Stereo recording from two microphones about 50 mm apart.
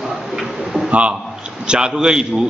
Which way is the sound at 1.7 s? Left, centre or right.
Centre.